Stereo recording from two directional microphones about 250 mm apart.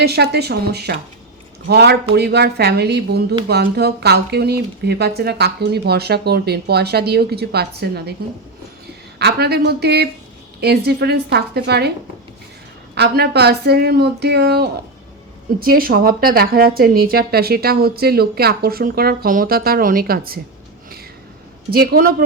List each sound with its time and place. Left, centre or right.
0.0 s a woman's voice: right
9.1 s a woman's voice: right
12.9 s a woman's voice: right
21.7 s a woman's voice: right